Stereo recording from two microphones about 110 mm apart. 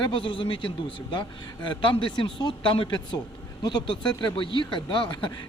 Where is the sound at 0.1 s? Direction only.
50° left (ahead or behind).